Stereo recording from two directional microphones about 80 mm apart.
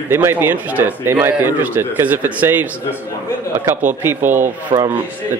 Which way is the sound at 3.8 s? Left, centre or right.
Right.